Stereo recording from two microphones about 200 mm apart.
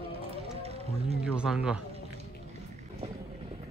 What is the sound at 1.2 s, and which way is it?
Speech, 5° right (ahead or behind).